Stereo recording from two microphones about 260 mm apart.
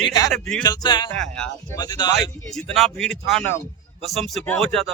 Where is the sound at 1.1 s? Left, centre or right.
Centre.